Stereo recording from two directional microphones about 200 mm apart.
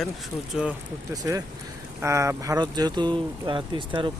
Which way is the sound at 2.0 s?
15° right (ahead or behind).